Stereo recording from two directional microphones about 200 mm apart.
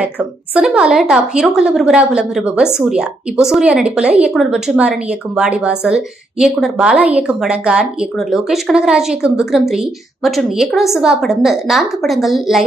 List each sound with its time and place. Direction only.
0.0 s a woman's voice: 5° right (ahead or behind)